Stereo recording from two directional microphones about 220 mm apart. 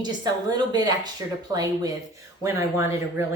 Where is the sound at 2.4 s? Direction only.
15° right (ahead or behind).